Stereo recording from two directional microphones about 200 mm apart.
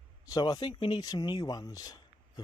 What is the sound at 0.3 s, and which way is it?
Speech, 20° left (ahead or behind).